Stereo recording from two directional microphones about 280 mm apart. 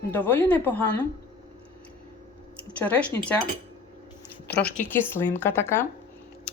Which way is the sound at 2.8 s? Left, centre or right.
Centre.